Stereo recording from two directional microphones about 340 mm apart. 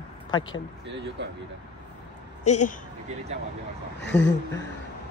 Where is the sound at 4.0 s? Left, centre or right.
Left.